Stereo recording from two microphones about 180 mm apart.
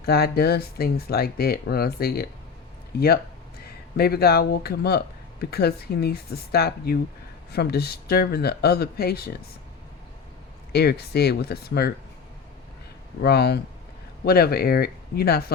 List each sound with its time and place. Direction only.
0.0 s speech: 60° left (ahead or behind)
3.9 s speech: 60° left (ahead or behind)
10.7 s speech: 65° left (ahead or behind)
13.2 s speech: 65° left (ahead or behind)